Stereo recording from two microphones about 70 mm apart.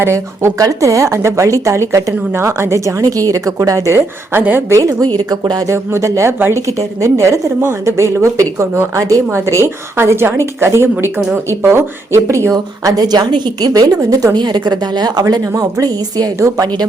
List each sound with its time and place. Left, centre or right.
0.0 s a woman's voice: right
0.6 s speech: right
4.3 s a woman's voice: right
4.7 s speech: right
5.3 s a woman's voice: right
5.6 s a woman's voice: right
12.9 s a woman's voice: right
15.2 s speech: right